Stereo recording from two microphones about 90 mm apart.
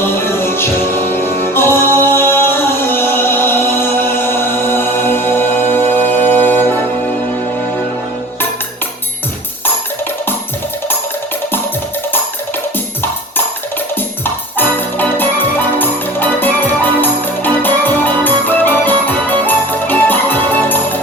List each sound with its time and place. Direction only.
0.0 s music: 25° left (ahead or behind)
13.9 s music: 20° left (ahead or behind)